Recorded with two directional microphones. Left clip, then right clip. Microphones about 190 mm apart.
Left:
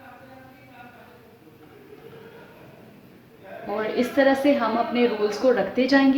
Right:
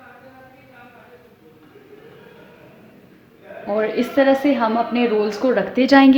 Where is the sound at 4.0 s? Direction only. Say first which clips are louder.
Right 2 dB; 35° right (ahead or behind).